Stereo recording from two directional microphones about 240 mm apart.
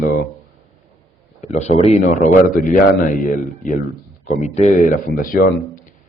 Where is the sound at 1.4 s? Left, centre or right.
Left.